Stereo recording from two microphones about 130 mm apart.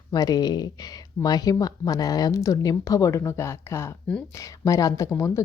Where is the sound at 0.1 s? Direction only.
30° left (ahead or behind).